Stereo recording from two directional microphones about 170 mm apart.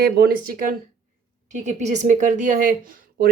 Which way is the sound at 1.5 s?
45° right (ahead or behind).